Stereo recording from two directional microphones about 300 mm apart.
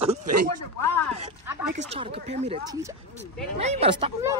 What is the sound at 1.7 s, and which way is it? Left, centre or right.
Speech, right.